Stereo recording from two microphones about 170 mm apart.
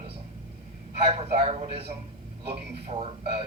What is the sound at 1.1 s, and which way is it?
Speech, 35° right (ahead or behind).